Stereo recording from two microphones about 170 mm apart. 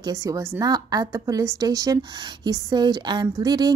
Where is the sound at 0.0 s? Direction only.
20° right (ahead or behind).